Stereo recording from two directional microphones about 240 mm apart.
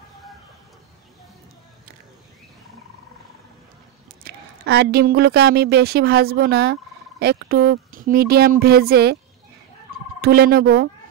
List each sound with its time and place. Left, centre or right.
4.2 s a woman's voice: right
10.2 s fowl: right